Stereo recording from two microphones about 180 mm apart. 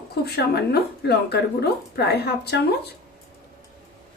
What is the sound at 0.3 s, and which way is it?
Speech, 65° left (ahead or behind).